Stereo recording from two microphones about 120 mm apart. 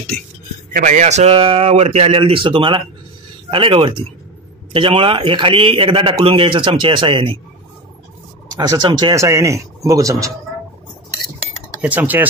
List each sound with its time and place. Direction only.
0.8 s speech: 80° right; by 7.3 s 45° right (ahead or behind)
8.5 s speech: 35° right (ahead or behind)
11.8 s speech: 15° right (ahead or behind)